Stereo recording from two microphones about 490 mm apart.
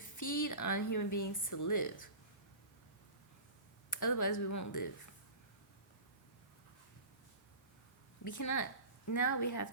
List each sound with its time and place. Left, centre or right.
0.0 s speech: left
3.8 s speech: left
8.2 s speech: left